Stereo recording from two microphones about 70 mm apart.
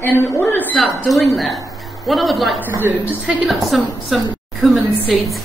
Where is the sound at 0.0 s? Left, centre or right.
Left.